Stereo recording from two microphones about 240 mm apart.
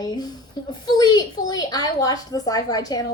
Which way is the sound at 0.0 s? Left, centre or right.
Centre.